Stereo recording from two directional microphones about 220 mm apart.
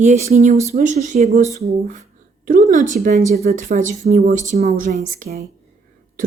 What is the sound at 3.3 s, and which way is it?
Speech, 45° right (ahead or behind).